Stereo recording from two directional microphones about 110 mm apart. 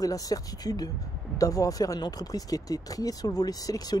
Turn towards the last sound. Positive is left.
turn(degrees=35)  # may be behind; listen again after turning